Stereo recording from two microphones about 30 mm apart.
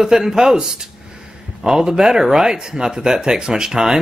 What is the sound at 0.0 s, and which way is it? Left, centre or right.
Speech, centre.